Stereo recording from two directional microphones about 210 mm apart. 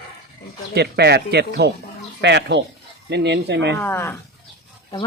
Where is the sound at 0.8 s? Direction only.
50° right (ahead or behind).